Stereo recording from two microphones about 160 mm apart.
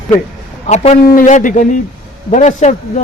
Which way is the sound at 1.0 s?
60° left (ahead or behind).